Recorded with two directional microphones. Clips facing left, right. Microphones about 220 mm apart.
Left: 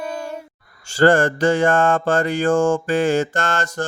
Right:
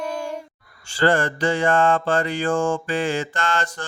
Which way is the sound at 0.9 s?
45° left (ahead or behind).